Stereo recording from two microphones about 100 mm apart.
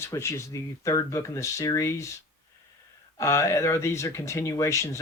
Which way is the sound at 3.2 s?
30° left (ahead or behind).